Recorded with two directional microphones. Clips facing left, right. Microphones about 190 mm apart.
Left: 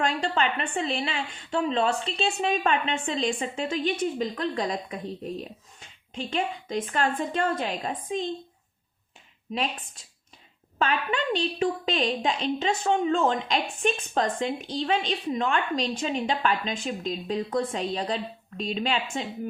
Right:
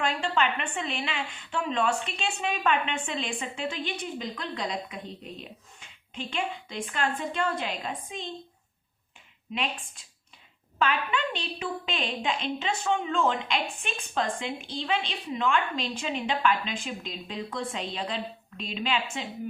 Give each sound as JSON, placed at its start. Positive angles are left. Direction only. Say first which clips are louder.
{"t": 0.0, "sound": "a woman's voice", "louder": "left 2 dB", "side_deg": 40}
{"t": 9.5, "sound": "a woman's voice", "louder": "left 3 dB", "side_deg": 40}
{"t": 10.8, "sound": "a woman's voice", "louder": "left 1 dB", "side_deg": 40}